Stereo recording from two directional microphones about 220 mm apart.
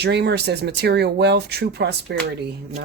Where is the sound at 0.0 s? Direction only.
50° right (ahead or behind).